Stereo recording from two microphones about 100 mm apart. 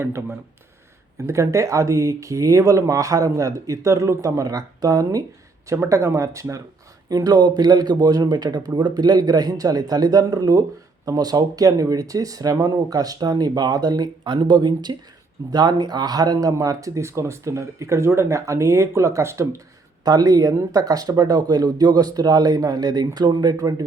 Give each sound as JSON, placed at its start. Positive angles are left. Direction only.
{"t": 0.0, "sound": "speech", "side_deg": -25}
{"t": 1.3, "sound": "speech", "side_deg": -30}